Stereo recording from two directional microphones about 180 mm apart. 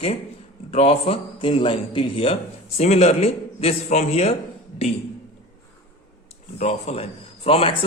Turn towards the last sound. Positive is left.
turn(degrees=30)  # may be behind; listen again after turning